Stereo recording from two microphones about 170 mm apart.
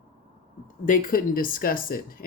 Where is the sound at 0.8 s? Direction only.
55° left (ahead or behind).